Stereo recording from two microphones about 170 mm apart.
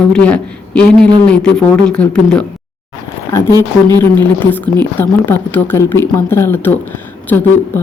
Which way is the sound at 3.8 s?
15° left (ahead or behind).